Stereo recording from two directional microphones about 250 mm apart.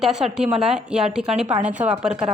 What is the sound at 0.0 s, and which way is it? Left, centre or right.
Speech, centre.